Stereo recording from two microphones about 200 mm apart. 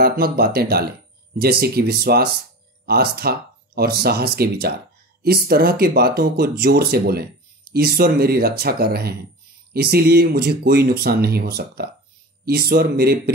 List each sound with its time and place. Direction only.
0.0 s speech: 50° right (ahead or behind)